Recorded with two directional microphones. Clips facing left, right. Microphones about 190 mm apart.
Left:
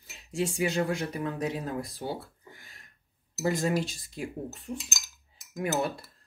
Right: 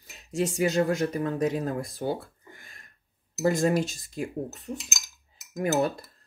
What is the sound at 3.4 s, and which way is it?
Speech, 45° right (ahead or behind).